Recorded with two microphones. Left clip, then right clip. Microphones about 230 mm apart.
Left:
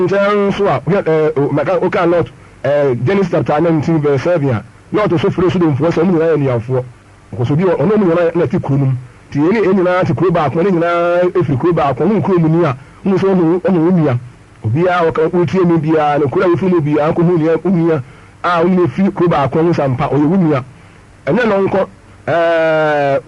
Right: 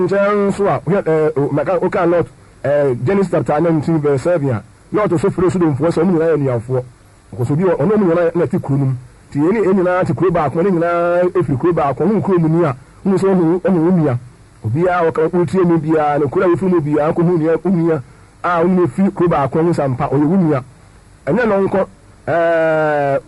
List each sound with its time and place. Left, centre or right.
0.0 s a man's voice: right